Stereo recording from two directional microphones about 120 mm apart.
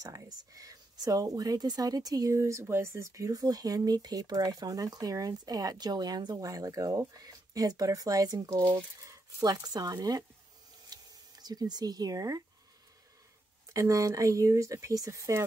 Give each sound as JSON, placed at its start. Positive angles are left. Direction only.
{"t": 0.0, "sound": "speech", "side_deg": -30}
{"t": 10.9, "sound": "a sound", "side_deg": -35}
{"t": 13.7, "sound": "speech", "side_deg": -25}